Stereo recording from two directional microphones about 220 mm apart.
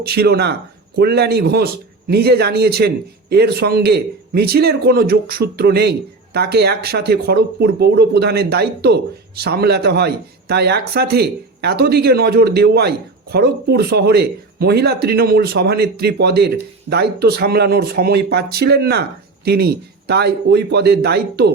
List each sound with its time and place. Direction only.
0.0 s speech: 45° right (ahead or behind)